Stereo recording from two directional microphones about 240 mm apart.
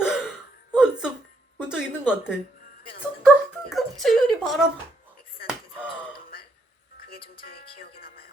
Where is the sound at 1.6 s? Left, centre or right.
Centre.